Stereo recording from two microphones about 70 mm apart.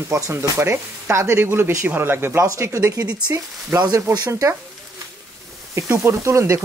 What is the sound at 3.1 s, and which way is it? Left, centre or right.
Speech, right.